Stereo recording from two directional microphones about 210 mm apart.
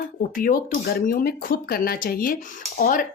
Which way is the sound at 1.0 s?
40° left (ahead or behind).